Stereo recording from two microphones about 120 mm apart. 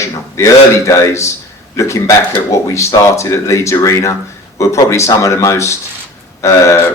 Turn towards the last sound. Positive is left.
turn(degrees=25)  # may be behind; listen again after turning